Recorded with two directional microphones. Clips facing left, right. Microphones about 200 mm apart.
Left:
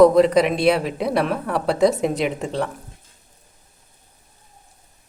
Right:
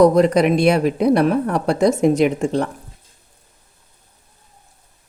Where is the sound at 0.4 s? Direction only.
50° right (ahead or behind).